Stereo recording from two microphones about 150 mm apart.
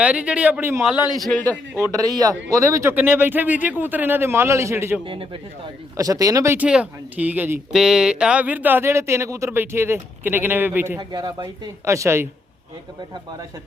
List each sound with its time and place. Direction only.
0.0 s speech: 10° right (ahead or behind)
1.1 s a man's voice: centre (ahead or behind)
1.5 s speech: 20° right (ahead or behind)
5.0 s speech: 35° right (ahead or behind)
6.0 s speech: 25° right (ahead or behind)
11.1 s speech: 25° right (ahead or behind)